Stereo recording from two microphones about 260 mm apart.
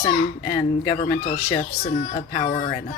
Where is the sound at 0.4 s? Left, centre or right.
Centre.